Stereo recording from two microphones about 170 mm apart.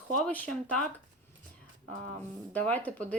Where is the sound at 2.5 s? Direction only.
10° left (ahead or behind).